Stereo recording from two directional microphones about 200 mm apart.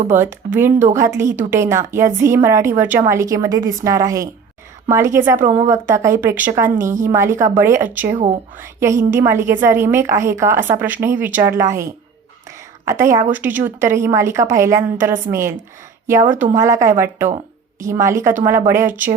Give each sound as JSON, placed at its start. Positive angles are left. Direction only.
{"t": 0.1, "sound": "a woman's voice", "side_deg": -10}
{"t": 16.6, "sound": "a woman's voice", "side_deg": -15}